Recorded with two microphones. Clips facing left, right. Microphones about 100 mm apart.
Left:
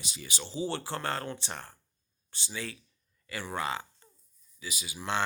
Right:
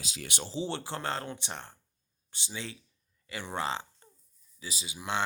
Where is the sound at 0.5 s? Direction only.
20° right (ahead or behind).